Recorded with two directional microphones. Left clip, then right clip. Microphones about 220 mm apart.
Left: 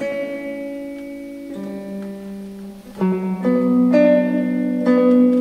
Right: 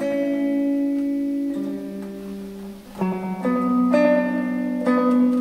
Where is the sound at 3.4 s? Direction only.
50° left (ahead or behind).